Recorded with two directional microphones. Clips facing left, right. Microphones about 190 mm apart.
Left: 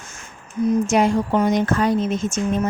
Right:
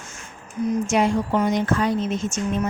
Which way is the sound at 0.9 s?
40° left (ahead or behind).